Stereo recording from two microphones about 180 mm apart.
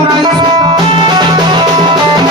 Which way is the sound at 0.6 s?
25° right (ahead or behind).